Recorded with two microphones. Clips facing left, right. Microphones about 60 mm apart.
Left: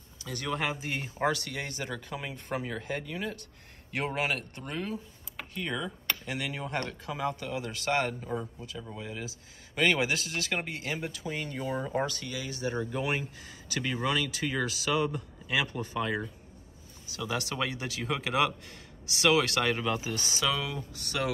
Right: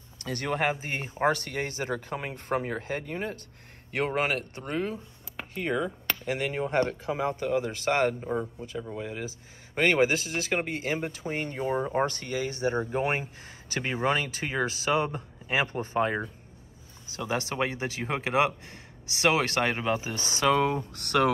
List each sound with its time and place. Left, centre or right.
0.2 s speech: right
8.9 s speech: right